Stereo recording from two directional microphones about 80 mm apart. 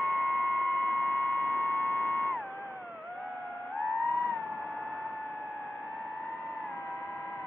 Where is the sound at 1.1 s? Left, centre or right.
Left.